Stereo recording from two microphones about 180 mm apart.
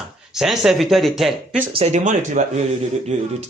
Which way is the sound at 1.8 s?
40° right (ahead or behind).